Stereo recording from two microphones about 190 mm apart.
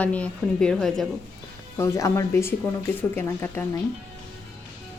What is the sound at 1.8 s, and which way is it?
A woman's voice, 15° left (ahead or behind).